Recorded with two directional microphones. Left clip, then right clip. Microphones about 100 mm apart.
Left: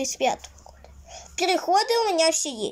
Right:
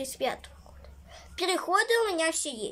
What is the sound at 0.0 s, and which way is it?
A woman's voice, 20° left (ahead or behind).